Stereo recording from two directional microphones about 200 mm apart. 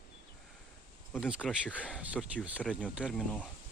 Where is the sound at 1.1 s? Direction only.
5° right (ahead or behind).